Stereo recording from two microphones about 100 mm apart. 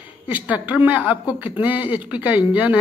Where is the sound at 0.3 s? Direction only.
15° right (ahead or behind).